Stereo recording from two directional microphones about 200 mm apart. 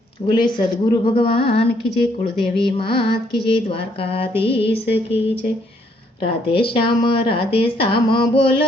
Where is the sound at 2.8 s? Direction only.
25° left (ahead or behind).